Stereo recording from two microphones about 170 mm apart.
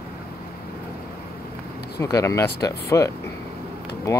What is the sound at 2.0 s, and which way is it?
Speech, 20° left (ahead or behind).